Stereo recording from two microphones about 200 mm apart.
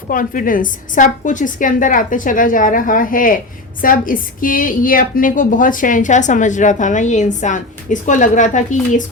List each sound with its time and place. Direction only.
0.1 s a woman's voice: 45° left (ahead or behind)